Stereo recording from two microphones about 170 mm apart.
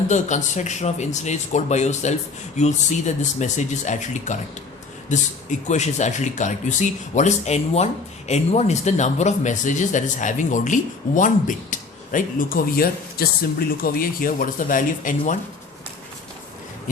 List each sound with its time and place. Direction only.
0.1 s speech: 45° left (ahead or behind)